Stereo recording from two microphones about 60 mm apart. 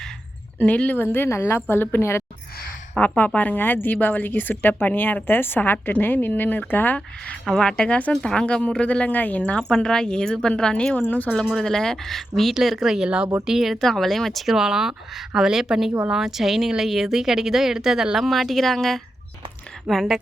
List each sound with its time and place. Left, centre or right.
0.6 s a woman's voice: left
3.0 s a woman's voice: left
7.6 s a woman's voice: centre
8.1 s speech: centre; by 9.4 s left
9.4 s a woman's voice: centre
11.0 s speech: left
11.5 s speech: centre
13.8 s speech: centre
14.5 s speech: centre
19.9 s speech: centre